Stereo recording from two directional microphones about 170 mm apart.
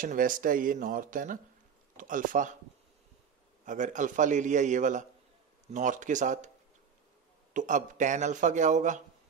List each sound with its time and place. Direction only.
0.0 s a man's voice: 50° right (ahead or behind)
3.6 s a man's voice: 45° right (ahead or behind)
7.5 s a man's voice: 45° right (ahead or behind)